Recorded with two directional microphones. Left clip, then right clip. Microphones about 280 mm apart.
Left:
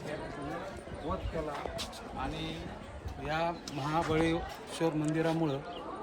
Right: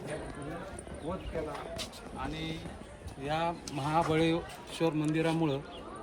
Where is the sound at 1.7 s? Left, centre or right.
Centre.